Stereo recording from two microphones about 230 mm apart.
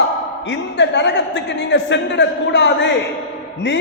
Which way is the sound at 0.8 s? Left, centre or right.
Left.